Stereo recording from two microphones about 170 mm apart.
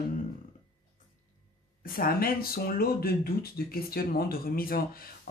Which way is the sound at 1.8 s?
60° left (ahead or behind).